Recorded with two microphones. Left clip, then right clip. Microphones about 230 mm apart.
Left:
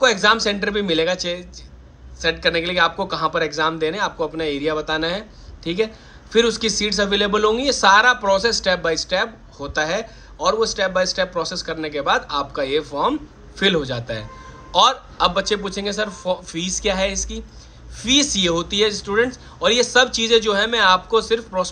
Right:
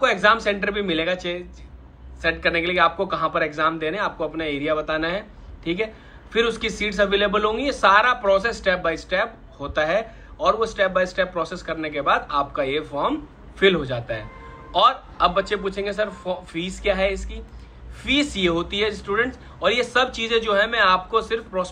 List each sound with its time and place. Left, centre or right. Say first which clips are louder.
0.0 s a man's voice: left 2 dB; centre